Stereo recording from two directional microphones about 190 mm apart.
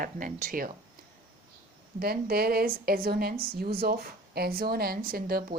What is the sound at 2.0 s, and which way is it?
Speech, 55° right (ahead or behind).